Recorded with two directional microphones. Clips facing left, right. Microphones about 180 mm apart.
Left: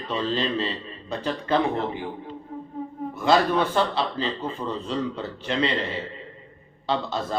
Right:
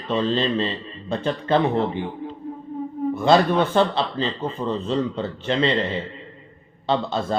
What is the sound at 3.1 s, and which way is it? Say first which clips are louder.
Mantra: right 3 dB; 25° right (ahead or behind).